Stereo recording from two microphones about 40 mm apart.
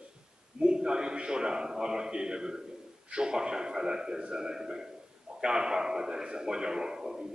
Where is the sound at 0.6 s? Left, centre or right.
Right.